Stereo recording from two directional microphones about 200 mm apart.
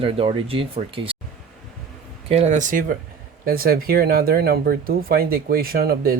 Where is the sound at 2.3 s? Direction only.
35° right (ahead or behind).